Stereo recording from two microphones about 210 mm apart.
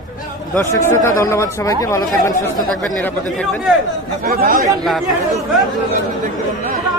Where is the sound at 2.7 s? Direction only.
Centre (ahead or behind).